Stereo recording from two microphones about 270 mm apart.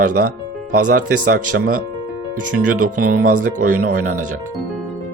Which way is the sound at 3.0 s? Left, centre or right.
Right.